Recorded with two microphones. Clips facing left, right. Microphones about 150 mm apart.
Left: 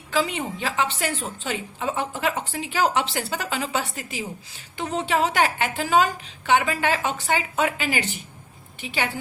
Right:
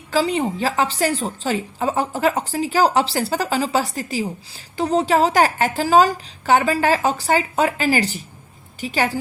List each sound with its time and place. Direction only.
0.1 s a woman's voice: 35° right (ahead or behind)